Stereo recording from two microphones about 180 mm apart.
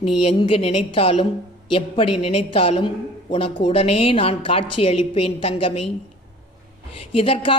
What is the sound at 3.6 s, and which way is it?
A woman's voice, 30° left (ahead or behind).